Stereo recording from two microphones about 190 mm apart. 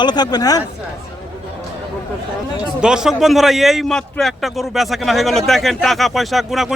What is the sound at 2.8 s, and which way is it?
A man's voice, 5° right (ahead or behind).